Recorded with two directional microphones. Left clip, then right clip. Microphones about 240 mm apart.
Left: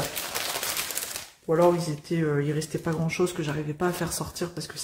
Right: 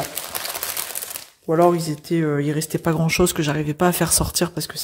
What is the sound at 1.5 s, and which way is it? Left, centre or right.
Speech, right.